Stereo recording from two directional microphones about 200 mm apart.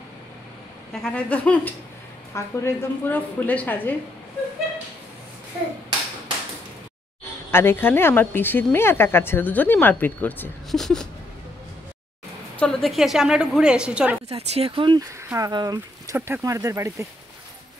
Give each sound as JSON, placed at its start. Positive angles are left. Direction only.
{"t": 1.0, "sound": "a woman's voice", "side_deg": 5}
{"t": 7.5, "sound": "a woman's voice", "side_deg": 10}
{"t": 12.5, "sound": "a woman's voice", "side_deg": 5}
{"t": 14.3, "sound": "speech", "side_deg": -30}